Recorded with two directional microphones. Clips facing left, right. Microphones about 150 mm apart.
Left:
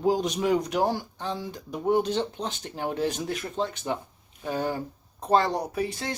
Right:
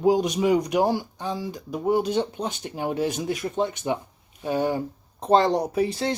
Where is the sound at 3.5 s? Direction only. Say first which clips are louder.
Right 3 dB; 15° right (ahead or behind).